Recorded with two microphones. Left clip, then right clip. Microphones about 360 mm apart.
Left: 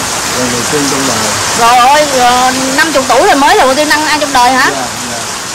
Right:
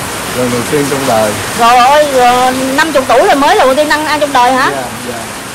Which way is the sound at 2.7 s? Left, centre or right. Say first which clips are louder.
Right 1 dB; centre.